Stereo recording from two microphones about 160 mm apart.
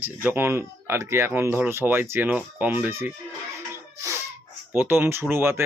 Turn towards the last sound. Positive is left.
turn(degrees=-15)  # may be behind; listen again after turning